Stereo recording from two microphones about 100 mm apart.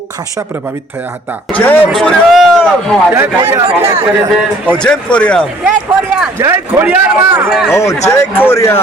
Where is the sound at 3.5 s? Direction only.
35° right (ahead or behind).